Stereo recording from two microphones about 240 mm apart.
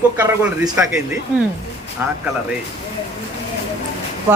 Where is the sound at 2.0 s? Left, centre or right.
Centre.